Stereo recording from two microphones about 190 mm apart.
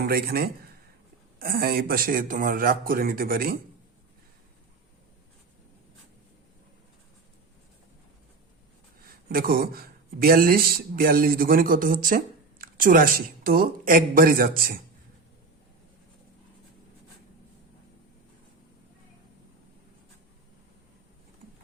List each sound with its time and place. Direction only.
0.0 s speech: 55° right (ahead or behind)
9.3 s speech: 50° right (ahead or behind)